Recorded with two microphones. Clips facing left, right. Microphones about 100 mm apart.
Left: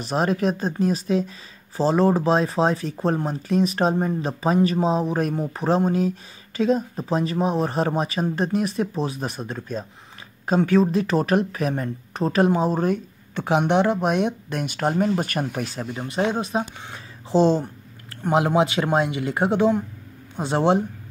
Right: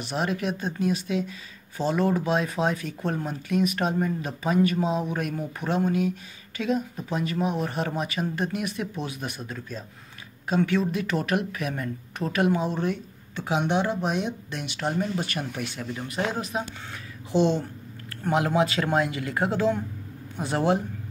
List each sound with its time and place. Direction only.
0.0 s speech: 40° left (ahead or behind)
18.2 s speech: 20° left (ahead or behind)